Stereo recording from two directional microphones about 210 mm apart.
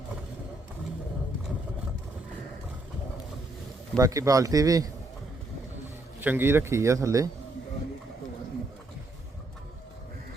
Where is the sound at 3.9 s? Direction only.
15° right (ahead or behind).